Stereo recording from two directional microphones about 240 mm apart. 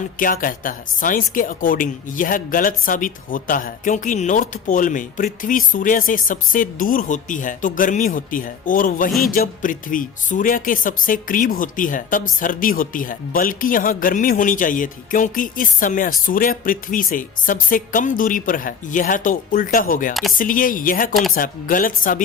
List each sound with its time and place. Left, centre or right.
0.2 s speech: left
21.1 s speech: centre
21.3 s speech: left